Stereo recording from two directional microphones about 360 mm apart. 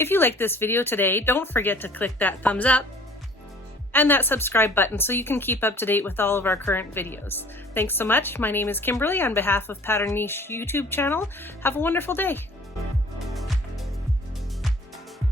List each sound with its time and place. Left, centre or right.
0.0 s speech: centre
3.9 s speech: centre
13.3 s music: centre